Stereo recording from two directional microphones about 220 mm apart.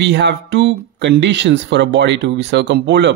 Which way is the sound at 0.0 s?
55° right (ahead or behind).